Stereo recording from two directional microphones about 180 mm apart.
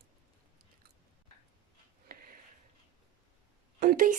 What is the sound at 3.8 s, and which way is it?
Speech, 50° right (ahead or behind).